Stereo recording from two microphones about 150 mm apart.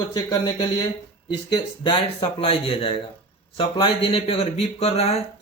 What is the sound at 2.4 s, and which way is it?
Speech, 40° left (ahead or behind).